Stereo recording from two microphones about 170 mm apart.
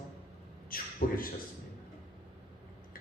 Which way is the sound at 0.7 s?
60° left (ahead or behind).